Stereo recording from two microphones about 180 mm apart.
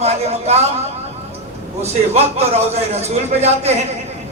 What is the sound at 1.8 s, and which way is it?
A man's voice, 35° right (ahead or behind).